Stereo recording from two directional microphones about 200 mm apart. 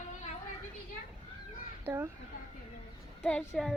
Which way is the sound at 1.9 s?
15° right (ahead or behind).